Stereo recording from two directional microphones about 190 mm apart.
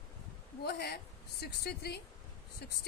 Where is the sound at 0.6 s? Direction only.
55° left (ahead or behind).